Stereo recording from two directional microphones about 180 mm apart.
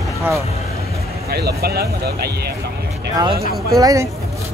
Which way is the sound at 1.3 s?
60° right (ahead or behind).